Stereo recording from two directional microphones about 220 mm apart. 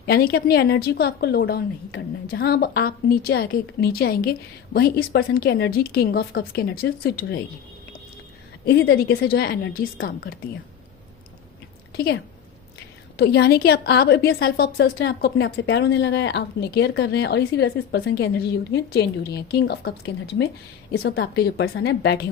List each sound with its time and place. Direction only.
0.1 s a woman's voice: 45° left (ahead or behind)
8.6 s a woman's voice: 45° left (ahead or behind)
13.1 s a woman's voice: 50° left (ahead or behind)
20.9 s a woman's voice: 45° left (ahead or behind)